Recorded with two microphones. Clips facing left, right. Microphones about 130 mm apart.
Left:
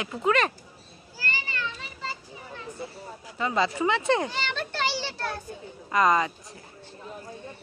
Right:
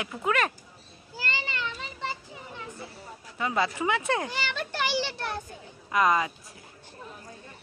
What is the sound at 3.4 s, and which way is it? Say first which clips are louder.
Children playing: left 2 dB; 5° right (ahead or behind).